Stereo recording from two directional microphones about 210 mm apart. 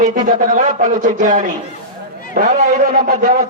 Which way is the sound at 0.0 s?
40° right (ahead or behind).